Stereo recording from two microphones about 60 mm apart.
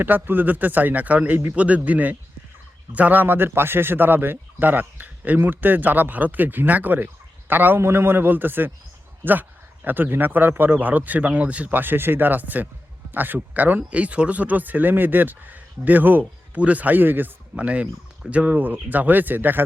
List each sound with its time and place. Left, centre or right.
0.0 s speech: right
7.8 s speech: right